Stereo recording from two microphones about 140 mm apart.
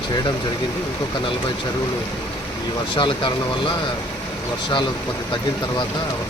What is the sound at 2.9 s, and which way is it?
Speech, 35° left (ahead or behind).